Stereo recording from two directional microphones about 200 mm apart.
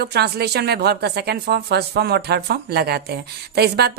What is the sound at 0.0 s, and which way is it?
A woman's voice, 55° right (ahead or behind).